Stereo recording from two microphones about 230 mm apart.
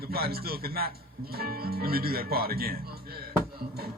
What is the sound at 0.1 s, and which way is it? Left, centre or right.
Speech, right.